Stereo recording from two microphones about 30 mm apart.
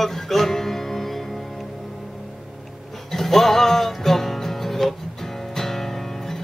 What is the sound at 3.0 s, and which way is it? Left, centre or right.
Music, centre.